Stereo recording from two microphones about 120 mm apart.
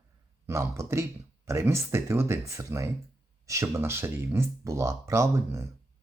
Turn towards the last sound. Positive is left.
turn(degrees=-25)  # may be behind; listen again after turning